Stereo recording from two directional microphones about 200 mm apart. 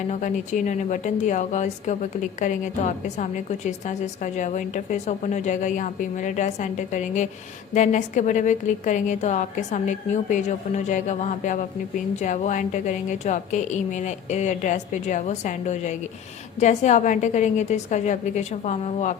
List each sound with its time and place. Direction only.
0.1 s speech: 40° left (ahead or behind)